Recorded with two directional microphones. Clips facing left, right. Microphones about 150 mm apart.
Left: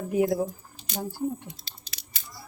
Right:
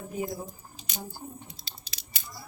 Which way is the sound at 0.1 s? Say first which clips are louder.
Left 10 dB; 75° left (ahead or behind).